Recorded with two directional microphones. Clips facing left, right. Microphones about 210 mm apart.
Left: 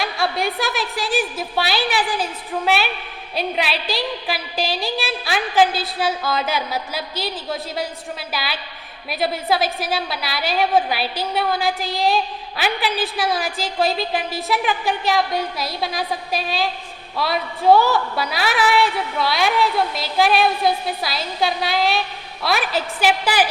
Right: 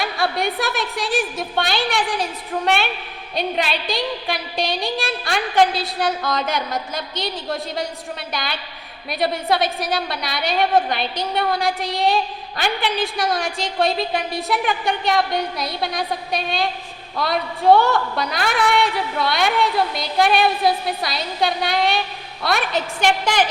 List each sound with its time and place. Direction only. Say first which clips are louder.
0.0 s a woman's voice: even; centre (ahead or behind)